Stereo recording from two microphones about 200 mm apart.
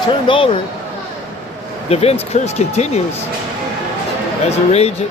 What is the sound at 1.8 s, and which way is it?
Speech, 30° left (ahead or behind).